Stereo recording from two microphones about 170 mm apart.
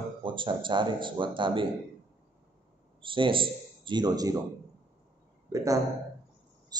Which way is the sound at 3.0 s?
30° right (ahead or behind).